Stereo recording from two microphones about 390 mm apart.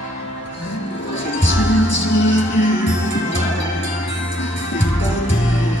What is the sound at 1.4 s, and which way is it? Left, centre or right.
Music, left.